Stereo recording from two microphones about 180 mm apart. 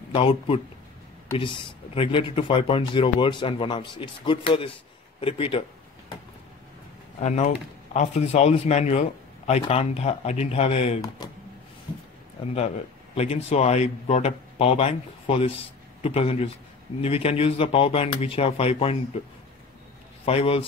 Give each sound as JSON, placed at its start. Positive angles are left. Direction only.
{"t": 0.1, "sound": "a man's voice", "side_deg": 30}
{"t": 7.2, "sound": "a man's voice", "side_deg": 40}
{"t": 11.2, "sound": "speech", "side_deg": 20}
{"t": 12.5, "sound": "a man's voice", "side_deg": 35}
{"t": 20.2, "sound": "a man's voice", "side_deg": 30}